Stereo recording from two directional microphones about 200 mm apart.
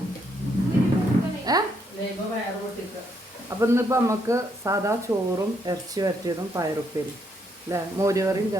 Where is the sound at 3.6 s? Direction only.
15° right (ahead or behind).